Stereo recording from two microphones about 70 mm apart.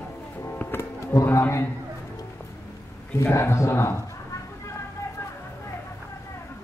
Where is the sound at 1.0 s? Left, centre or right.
Left.